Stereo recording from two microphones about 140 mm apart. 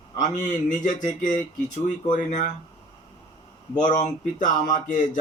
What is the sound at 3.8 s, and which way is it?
Speech, 65° left (ahead or behind).